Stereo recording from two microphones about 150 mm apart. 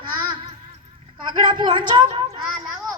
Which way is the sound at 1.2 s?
30° right (ahead or behind).